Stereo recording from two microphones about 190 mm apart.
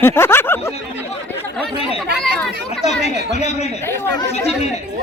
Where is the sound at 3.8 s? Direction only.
15° left (ahead or behind).